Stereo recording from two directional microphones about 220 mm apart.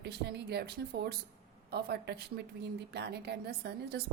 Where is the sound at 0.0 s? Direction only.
45° right (ahead or behind).